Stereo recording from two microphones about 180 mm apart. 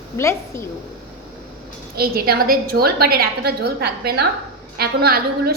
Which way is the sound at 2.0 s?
60° right (ahead or behind).